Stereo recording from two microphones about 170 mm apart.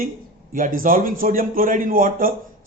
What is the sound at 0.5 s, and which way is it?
A man's voice, 55° right (ahead or behind).